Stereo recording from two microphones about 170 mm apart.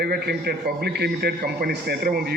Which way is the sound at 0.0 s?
65° right (ahead or behind).